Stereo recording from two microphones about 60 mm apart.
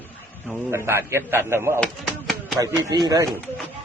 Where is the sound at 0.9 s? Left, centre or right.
Right.